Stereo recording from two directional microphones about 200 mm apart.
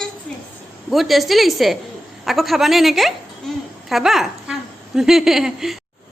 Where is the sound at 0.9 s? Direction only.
Centre (ahead or behind).